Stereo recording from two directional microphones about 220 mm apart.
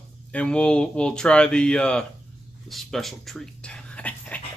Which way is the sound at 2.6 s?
Centre (ahead or behind).